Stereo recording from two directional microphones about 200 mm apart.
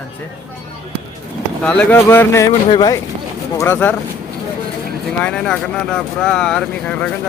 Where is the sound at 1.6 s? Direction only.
5° left (ahead or behind).